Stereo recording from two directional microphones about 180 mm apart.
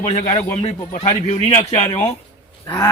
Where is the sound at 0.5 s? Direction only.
35° left (ahead or behind).